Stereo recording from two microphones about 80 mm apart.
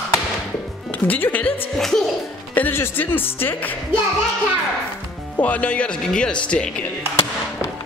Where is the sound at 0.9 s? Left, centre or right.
Left.